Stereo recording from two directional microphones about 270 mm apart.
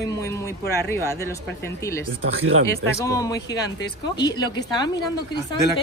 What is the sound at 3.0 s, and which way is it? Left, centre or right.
A woman's voice, centre.